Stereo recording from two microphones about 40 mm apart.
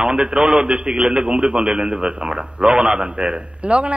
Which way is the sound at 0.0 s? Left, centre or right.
Right.